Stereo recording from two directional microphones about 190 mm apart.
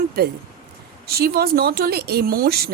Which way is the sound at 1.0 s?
55° right (ahead or behind).